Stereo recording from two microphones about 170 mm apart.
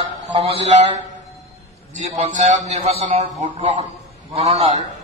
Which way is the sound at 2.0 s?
40° right (ahead or behind).